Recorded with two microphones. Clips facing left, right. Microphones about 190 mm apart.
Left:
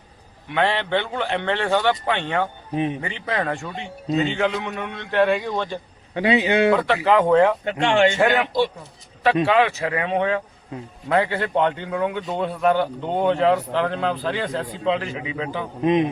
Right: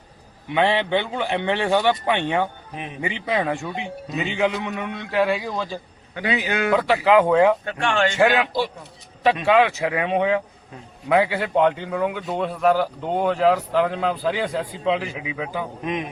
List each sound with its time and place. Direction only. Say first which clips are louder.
0.5 s a man's voice: right 2 dB; 15° right (ahead or behind)
2.7 s speech: left 16 dB; 30° left (ahead or behind)
3.0 s a man's voice: right 2 dB; 15° right (ahead or behind)
6.1 s speech: left 6 dB; 25° left (ahead or behind)
6.7 s speech: right 2 dB; 5° right (ahead or behind)
7.6 s speech: left 4 dB; 20° left (ahead or behind)
8.2 s a man's voice: even; 15° right (ahead or behind)
15.8 s speech: left 11 dB; 30° left (ahead or behind)